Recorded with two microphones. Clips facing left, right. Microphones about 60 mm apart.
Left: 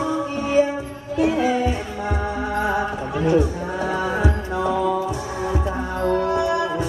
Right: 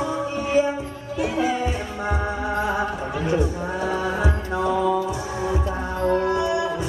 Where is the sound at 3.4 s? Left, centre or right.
Left.